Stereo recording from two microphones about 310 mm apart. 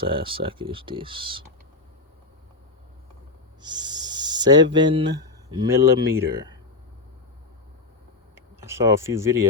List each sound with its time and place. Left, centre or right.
0.0 s speech: centre
3.6 s speech: centre
8.4 s speech: centre